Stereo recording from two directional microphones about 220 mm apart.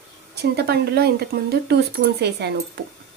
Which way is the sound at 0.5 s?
50° right (ahead or behind).